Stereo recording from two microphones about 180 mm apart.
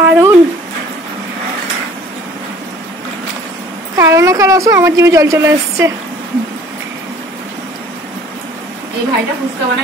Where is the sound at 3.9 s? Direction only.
15° right (ahead or behind).